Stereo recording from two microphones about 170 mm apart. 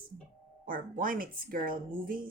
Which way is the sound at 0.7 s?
55° right (ahead or behind).